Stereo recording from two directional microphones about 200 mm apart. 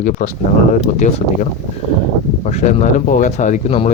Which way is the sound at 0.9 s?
40° left (ahead or behind).